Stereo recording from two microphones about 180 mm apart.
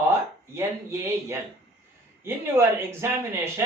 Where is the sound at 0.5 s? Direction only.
15° right (ahead or behind).